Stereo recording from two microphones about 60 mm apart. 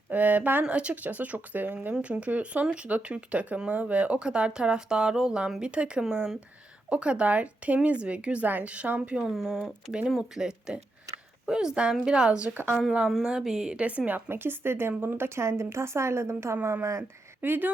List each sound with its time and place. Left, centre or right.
0.1 s speech: right
0.6 s speech: centre
9.3 s speech: centre
11.1 s a sound: right
11.4 s speech: centre
14.3 s speech: right
15.4 s a woman's voice: right
17.0 s speech: right